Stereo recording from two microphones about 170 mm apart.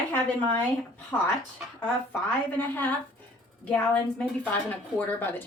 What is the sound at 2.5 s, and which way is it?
A woman's voice, 10° left (ahead or behind).